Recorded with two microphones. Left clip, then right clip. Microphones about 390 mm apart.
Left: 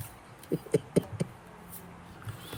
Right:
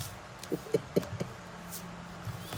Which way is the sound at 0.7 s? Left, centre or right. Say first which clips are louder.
Left 2 dB; left.